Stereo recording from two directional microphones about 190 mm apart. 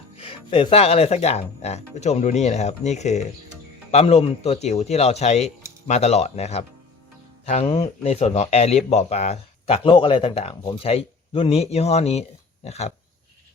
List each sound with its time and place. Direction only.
0.2 s a man's voice: 30° left (ahead or behind)